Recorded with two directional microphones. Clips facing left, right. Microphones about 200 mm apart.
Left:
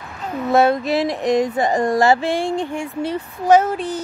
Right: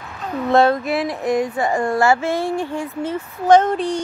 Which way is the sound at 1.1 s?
20° left (ahead or behind).